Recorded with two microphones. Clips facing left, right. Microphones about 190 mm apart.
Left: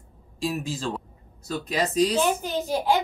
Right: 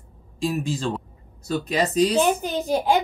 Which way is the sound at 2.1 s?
15° right (ahead or behind).